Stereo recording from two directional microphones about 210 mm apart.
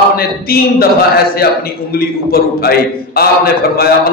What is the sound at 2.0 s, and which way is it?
A man's voice, 45° left (ahead or behind).